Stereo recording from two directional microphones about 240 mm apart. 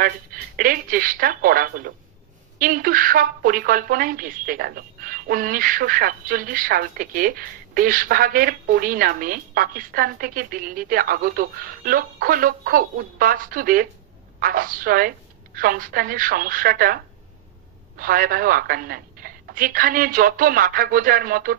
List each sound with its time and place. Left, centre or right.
0.0 s a woman's voice: right